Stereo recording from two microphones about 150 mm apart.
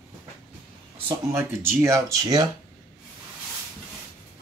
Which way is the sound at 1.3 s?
15° right (ahead or behind).